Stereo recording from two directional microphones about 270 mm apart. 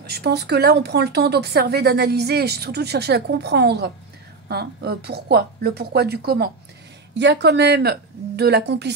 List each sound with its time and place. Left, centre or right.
0.0 s speech: right